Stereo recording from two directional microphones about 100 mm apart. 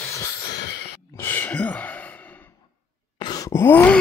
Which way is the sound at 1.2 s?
20° left (ahead or behind).